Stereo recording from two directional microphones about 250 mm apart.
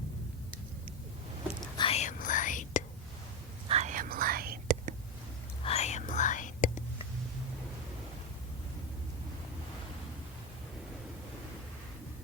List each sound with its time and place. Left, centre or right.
1.8 s whispering: left
3.7 s whispering: right
5.6 s whispering: left